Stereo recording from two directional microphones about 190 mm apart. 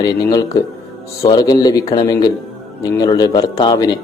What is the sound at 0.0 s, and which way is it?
Speech, 20° left (ahead or behind).